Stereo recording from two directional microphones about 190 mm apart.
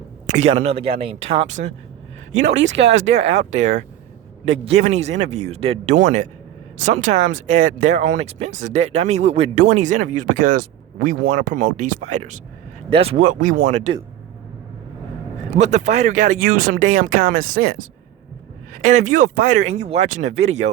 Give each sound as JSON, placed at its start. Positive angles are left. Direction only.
{"t": 0.3, "sound": "speech", "side_deg": -35}
{"t": 2.3, "sound": "speech", "side_deg": -75}
{"t": 2.9, "sound": "speech", "side_deg": -35}
{"t": 4.4, "sound": "speech", "side_deg": -35}
{"t": 15.5, "sound": "speech", "side_deg": -35}